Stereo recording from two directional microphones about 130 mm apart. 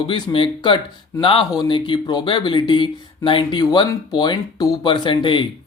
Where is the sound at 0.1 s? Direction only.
35° left (ahead or behind).